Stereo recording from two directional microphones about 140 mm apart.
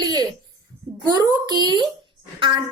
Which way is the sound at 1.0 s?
30° right (ahead or behind).